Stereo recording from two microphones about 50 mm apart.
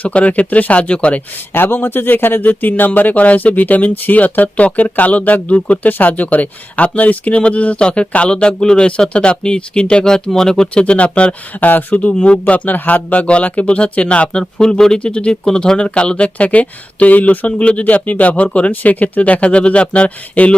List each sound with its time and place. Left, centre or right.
0.0 s speech: left
1.5 s speech: left
11.6 s speech: left